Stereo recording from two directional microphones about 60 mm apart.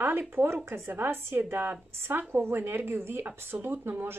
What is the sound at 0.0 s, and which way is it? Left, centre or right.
Speech, right.